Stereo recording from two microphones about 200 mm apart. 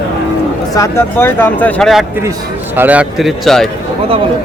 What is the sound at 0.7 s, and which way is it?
A man's voice, 15° left (ahead or behind).